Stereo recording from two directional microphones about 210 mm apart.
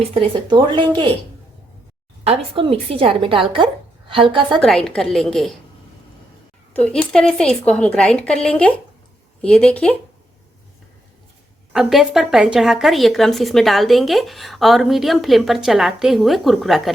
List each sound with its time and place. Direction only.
0.1 s a woman's voice: 25° right (ahead or behind)
2.2 s a woman's voice: 25° right (ahead or behind)
4.6 s speech: centre (ahead or behind)
6.7 s speech: 5° left (ahead or behind)
11.7 s speech: centre (ahead or behind)